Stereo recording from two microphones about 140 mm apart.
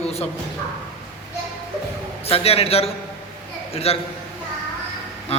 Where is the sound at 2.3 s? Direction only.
45° left (ahead or behind).